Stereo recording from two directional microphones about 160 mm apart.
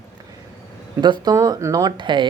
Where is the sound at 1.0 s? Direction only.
25° right (ahead or behind).